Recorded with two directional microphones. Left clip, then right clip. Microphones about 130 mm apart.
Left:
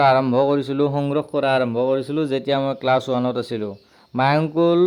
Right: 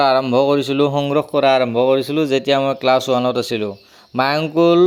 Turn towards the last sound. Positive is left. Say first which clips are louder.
# right 3 dB
turn(degrees=-30)  # may be behind; listen again after turning